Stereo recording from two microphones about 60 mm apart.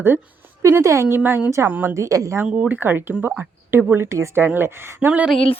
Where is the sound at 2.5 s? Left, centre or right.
Right.